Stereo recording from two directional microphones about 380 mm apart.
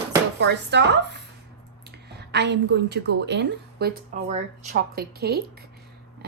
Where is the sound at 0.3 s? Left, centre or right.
Right.